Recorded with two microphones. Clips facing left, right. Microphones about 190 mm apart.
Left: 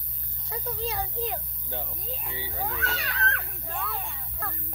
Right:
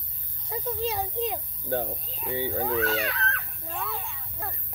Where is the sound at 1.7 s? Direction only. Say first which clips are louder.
Right 8 dB; 45° right (ahead or behind).